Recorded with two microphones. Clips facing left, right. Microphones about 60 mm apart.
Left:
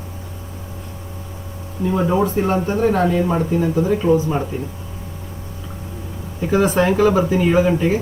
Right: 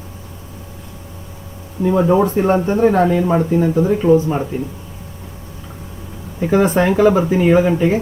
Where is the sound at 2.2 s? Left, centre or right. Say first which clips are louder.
Right 3 dB; right.